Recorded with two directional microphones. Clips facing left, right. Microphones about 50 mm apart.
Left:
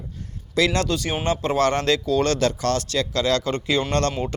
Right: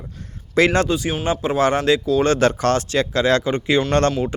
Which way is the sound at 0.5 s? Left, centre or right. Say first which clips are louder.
Right 5 dB; right.